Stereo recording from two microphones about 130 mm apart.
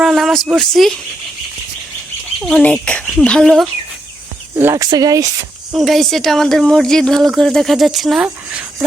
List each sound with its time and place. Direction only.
0.0 s speech: centre (ahead or behind)
2.4 s speech: 5° left (ahead or behind)
4.5 s speech: 20° right (ahead or behind)
5.7 s speech: centre (ahead or behind)